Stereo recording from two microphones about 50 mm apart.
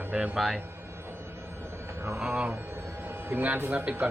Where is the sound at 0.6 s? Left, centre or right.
Right.